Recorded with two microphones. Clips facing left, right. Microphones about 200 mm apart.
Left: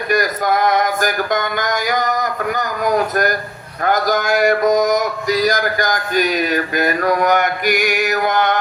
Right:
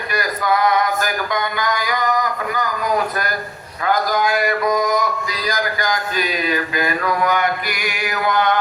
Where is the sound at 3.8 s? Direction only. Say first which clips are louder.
Left 2 dB; 45° left (ahead or behind).